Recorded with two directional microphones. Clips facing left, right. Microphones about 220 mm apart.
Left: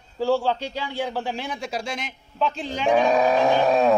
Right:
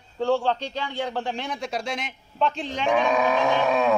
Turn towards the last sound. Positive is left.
turn(degrees=35)  # may be behind; listen again after turning